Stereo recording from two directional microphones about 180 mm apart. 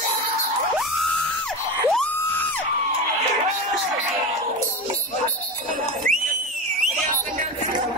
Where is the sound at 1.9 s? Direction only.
5° left (ahead or behind).